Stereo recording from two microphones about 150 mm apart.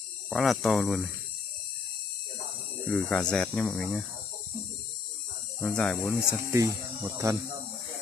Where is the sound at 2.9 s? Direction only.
5° left (ahead or behind).